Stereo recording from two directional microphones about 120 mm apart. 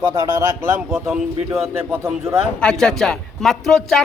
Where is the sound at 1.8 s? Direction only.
20° right (ahead or behind).